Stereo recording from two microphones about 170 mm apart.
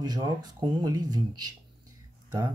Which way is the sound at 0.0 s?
25° right (ahead or behind).